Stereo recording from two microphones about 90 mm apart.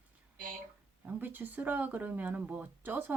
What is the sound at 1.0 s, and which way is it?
Speech, 20° right (ahead or behind).